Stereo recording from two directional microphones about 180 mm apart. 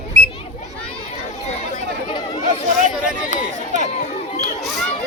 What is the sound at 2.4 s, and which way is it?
Speech, 45° right (ahead or behind).